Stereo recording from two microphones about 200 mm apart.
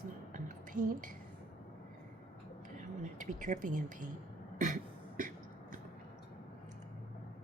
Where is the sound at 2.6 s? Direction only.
40° right (ahead or behind).